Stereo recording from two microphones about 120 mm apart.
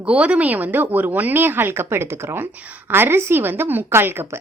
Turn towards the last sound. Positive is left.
turn(degrees=-20)  # may be behind; listen again after turning